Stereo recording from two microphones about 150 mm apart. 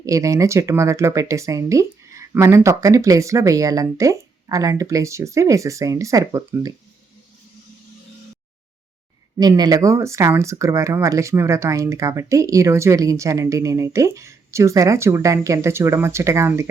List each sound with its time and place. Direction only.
0.0 s speech: 20° right (ahead or behind)
9.4 s speech: 25° right (ahead or behind)